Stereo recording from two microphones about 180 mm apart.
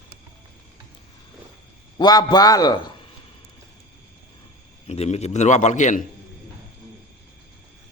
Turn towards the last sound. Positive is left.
turn(degrees=45)  # may be behind; listen again after turning